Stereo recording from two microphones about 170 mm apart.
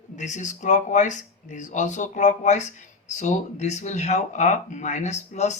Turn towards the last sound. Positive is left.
turn(degrees=40)  # may be behind; listen again after turning